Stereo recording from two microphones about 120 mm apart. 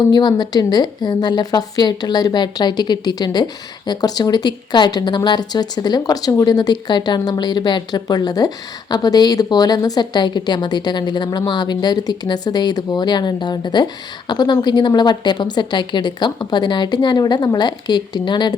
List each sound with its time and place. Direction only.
0.1 s speech: 35° left (ahead or behind)